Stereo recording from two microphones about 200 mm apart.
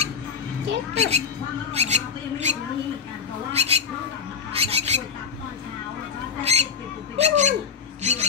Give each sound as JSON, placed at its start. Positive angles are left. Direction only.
{"t": 0.9, "sound": "speech", "side_deg": -30}
{"t": 1.7, "sound": "a sound", "side_deg": -35}
{"t": 3.5, "sound": "speech", "side_deg": -30}
{"t": 6.4, "sound": "speech", "side_deg": -30}